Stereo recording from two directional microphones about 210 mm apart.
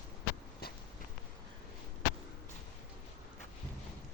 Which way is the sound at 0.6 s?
45° left (ahead or behind).